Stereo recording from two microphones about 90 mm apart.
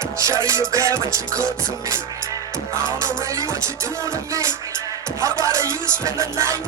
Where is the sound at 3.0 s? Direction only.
35° right (ahead or behind).